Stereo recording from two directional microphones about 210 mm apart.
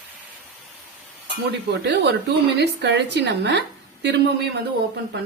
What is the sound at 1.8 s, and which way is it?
A woman's voice, 55° right (ahead or behind).